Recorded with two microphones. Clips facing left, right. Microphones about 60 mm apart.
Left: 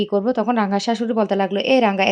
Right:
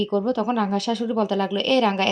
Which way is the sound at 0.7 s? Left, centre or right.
Left.